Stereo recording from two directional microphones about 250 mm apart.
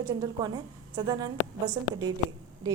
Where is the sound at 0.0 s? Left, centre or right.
Centre.